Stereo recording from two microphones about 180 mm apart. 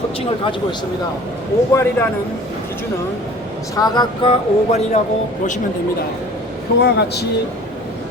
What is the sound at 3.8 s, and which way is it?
Speech, 20° left (ahead or behind).